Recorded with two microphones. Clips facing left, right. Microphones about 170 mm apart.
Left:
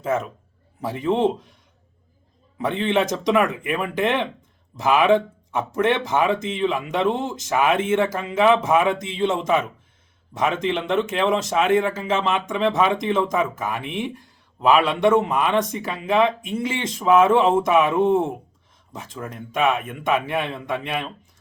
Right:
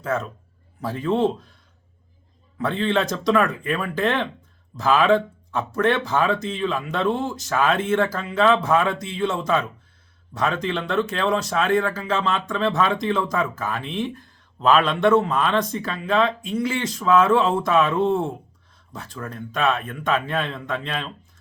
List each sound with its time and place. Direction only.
0.0 s a man's voice: 20° left (ahead or behind)
2.6 s speech: 20° left (ahead or behind)